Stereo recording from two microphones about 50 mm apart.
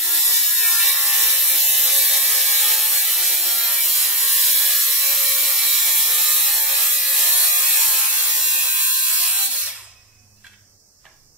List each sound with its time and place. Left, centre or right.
0.0 s ratchet: centre
8.8 s ratchet: centre
9.6 s a sound: centre